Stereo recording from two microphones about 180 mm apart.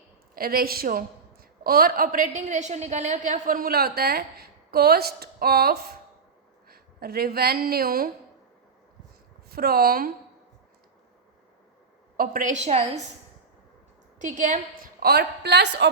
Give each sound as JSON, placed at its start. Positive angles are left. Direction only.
{"t": 0.3, "sound": "a woman's voice", "side_deg": -55}
{"t": 9.5, "sound": "a woman's voice", "side_deg": -60}
{"t": 12.1, "sound": "a woman's voice", "side_deg": -50}
{"t": 14.2, "sound": "a woman's voice", "side_deg": -45}
{"t": 15.0, "sound": "a woman's voice", "side_deg": -65}